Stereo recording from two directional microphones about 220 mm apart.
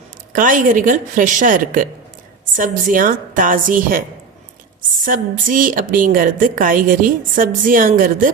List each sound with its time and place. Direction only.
0.3 s a woman's voice: 40° right (ahead or behind)
5.0 s a woman's voice: 40° right (ahead or behind)